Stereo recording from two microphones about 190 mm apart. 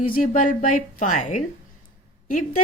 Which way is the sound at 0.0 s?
45° left (ahead or behind).